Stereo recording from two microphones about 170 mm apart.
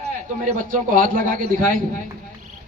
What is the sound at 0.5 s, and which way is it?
A man's voice, 50° right (ahead or behind).